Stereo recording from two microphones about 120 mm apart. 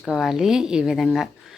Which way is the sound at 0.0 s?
Centre (ahead or behind).